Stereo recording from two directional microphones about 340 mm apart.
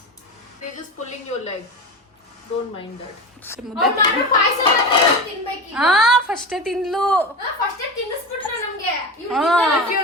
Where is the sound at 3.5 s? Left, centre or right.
Centre.